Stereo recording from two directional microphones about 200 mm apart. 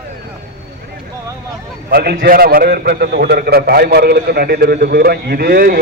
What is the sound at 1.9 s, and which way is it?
A man's voice, 55° right (ahead or behind).